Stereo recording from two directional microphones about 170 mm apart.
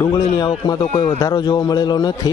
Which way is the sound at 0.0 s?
25° left (ahead or behind).